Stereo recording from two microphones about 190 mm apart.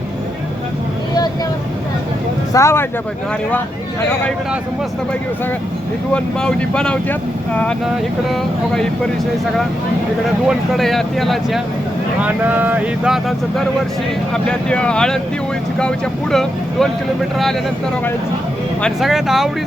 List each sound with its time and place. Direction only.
2.5 s speech: 15° left (ahead or behind)
6.1 s speech: 5° left (ahead or behind)
10.4 s speech: centre (ahead or behind)
16.3 s speech: centre (ahead or behind)
18.8 s speech: centre (ahead or behind)